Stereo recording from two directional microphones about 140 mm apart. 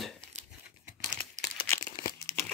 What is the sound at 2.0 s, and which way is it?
Crumpling, 20° left (ahead or behind).